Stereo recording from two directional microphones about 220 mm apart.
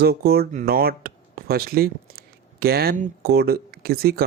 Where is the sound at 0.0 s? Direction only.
45° right (ahead or behind).